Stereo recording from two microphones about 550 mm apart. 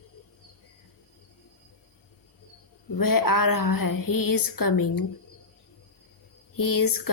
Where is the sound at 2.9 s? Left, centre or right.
Left.